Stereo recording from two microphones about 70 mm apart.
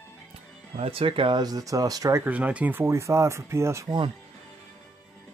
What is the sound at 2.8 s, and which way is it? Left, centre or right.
Speech, right.